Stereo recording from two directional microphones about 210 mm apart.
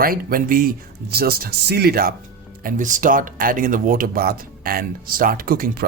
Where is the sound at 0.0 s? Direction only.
45° right (ahead or behind).